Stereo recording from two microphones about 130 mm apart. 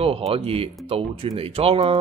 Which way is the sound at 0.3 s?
45° right (ahead or behind).